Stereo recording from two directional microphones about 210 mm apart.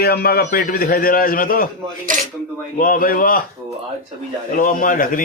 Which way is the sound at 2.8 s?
40° left (ahead or behind).